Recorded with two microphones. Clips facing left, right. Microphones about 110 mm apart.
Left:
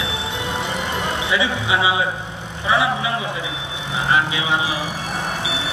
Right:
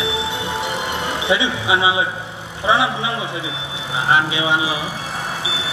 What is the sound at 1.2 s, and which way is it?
A man's voice, 20° right (ahead or behind).